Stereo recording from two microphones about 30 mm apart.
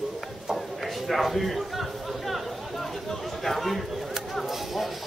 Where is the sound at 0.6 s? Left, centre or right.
Centre.